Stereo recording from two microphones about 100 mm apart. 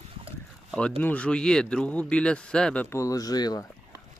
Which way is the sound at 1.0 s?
15° left (ahead or behind).